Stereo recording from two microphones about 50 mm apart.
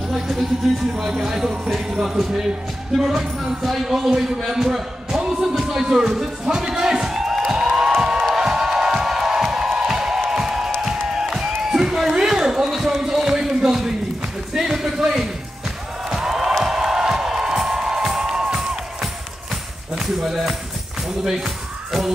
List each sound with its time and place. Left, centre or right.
0.1 s a sound: centre
0.9 s speech: centre
5.2 s music: centre
10.8 s a sound: centre
14.5 s basketball bounce: centre
16.1 s music: centre
20.0 s speech: centre